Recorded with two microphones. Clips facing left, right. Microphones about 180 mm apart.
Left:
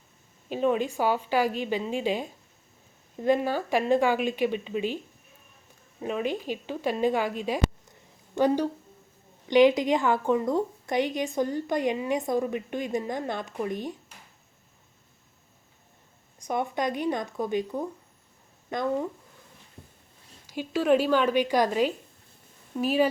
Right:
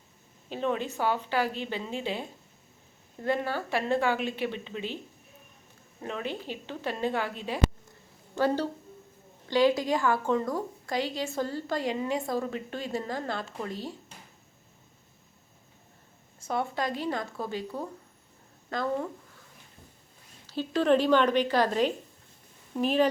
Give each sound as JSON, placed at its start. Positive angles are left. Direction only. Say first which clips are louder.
{"t": 0.5, "sound": "a woman's voice", "louder": "left 5 dB", "side_deg": 15}
{"t": 6.0, "sound": "a woman's voice", "louder": "left 5 dB", "side_deg": 15}
{"t": 16.4, "sound": "speech", "louder": "left 2 dB", "side_deg": 15}
{"t": 20.5, "sound": "a woman's voice", "louder": "left 1 dB", "side_deg": 10}